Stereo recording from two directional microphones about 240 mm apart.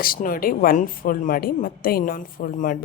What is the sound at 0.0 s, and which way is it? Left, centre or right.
Speech, left.